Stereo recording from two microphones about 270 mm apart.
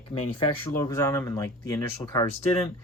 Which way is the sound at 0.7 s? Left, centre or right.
Centre.